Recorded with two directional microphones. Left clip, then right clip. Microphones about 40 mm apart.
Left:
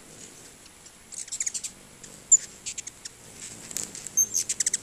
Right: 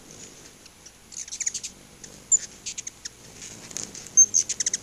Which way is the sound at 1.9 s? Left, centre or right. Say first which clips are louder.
Left 2 dB; centre.